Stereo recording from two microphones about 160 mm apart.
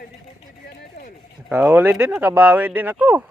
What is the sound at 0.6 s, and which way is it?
Run, 70° left (ahead or behind).